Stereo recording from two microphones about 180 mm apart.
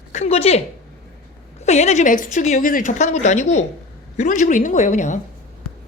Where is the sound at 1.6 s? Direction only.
40° left (ahead or behind).